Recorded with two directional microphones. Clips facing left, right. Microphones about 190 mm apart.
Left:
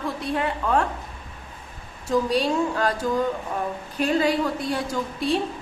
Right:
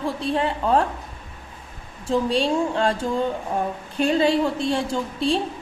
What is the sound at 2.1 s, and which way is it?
A woman's voice, 25° right (ahead or behind).